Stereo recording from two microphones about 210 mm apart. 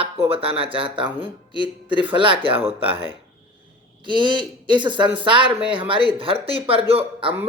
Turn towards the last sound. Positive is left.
turn(degrees=-25)  # may be behind; listen again after turning